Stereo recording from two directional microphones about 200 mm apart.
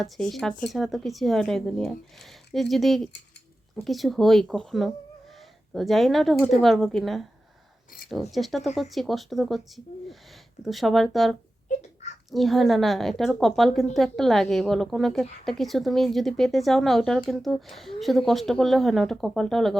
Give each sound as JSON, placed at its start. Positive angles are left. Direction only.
{"t": 0.0, "sound": "a woman's voice", "side_deg": 0}
{"t": 11.7, "sound": "a sound", "side_deg": 35}
{"t": 12.3, "sound": "a woman's voice", "side_deg": 0}